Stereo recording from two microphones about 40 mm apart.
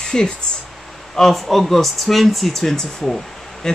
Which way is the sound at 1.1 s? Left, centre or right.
Centre.